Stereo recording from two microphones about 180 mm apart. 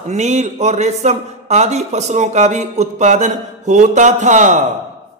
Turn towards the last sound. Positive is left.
turn(degrees=-40)  # may be behind; listen again after turning